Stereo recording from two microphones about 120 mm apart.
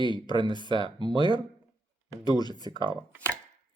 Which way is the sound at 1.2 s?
40° left (ahead or behind).